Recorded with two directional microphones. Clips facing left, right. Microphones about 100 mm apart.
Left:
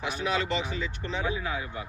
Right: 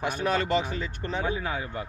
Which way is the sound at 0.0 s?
50° right (ahead or behind).